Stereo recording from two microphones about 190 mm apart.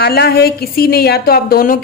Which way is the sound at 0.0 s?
55° left (ahead or behind).